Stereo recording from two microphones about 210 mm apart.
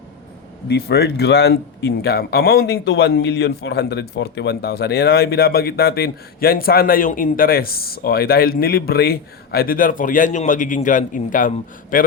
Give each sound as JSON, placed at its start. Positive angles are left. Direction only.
{"t": 0.7, "sound": "speech", "side_deg": 50}